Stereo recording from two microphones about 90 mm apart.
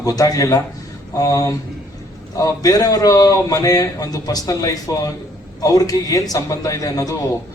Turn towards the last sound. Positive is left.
turn(degrees=40)  # may be behind; listen again after turning